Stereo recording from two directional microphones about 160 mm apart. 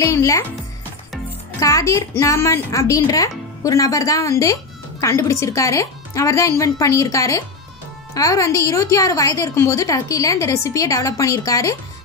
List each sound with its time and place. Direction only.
0.0 s a woman's voice: 20° left (ahead or behind)
1.6 s a woman's voice: 20° left (ahead or behind)